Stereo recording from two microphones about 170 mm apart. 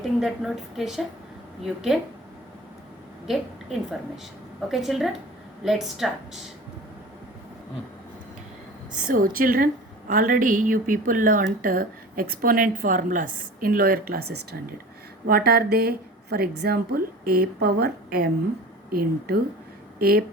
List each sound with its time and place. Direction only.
0.0 s a woman's voice: centre (ahead or behind)
3.2 s a woman's voice: centre (ahead or behind)
9.0 s a woman's voice: 55° right (ahead or behind)
14.1 s a woman's voice: 70° right (ahead or behind)